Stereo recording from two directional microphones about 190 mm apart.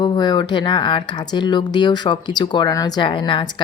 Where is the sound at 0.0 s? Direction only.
20° left (ahead or behind).